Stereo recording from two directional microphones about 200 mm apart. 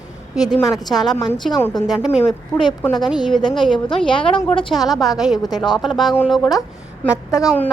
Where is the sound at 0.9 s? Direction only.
Centre (ahead or behind).